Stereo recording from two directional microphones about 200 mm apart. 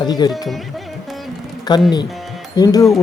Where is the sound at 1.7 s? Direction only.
20° left (ahead or behind).